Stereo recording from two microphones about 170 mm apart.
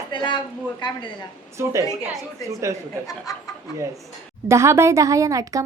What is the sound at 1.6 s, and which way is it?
A woman's voice, 15° right (ahead or behind).